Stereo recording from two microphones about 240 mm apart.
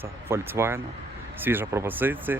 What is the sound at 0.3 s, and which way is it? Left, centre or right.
Speech, centre.